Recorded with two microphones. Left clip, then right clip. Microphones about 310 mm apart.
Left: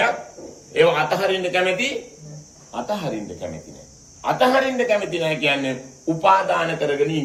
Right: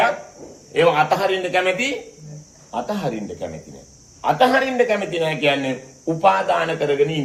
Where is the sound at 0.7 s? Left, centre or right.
Centre.